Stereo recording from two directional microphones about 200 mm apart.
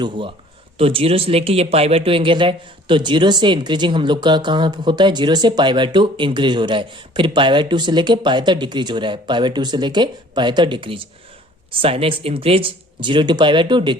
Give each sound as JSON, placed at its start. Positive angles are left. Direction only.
{"t": 0.8, "sound": "speech", "side_deg": -30}